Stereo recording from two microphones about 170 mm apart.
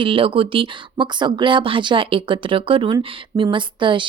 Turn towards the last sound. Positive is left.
turn(degrees=-30)  # may be behind; listen again after turning